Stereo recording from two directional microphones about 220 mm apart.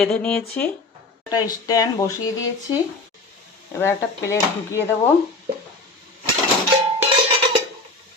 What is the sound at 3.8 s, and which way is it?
Speech, 10° left (ahead or behind).